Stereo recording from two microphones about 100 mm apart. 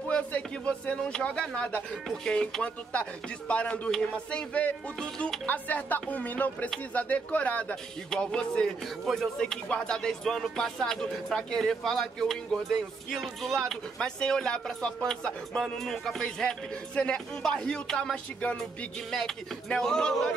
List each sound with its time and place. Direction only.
0.1 s speech: 10° left (ahead or behind)